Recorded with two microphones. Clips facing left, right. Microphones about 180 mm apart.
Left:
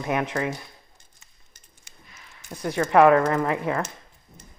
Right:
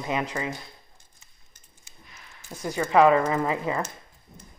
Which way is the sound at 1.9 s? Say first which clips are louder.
Left 1 dB; 70° left (ahead or behind).